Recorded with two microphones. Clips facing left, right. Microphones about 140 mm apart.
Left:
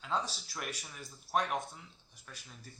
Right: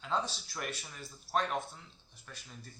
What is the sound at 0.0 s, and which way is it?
Speech, 10° left (ahead or behind).